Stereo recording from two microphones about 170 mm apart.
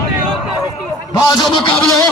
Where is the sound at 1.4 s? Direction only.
30° left (ahead or behind).